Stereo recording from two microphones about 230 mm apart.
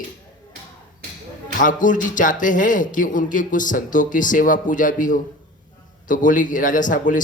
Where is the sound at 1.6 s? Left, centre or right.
Left.